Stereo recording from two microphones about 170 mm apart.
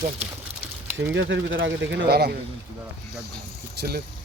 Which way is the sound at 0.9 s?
90° right.